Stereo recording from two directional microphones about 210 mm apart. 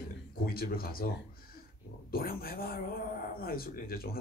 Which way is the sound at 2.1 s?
45° left (ahead or behind).